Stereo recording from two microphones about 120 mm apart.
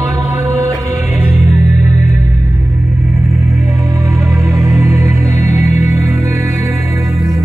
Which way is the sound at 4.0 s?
25° right (ahead or behind).